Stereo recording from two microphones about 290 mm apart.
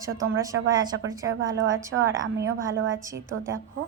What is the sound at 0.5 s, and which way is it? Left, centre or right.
Speech, right.